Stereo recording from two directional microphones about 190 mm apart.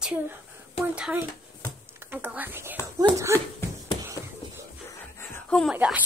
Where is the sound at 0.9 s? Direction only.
10° right (ahead or behind).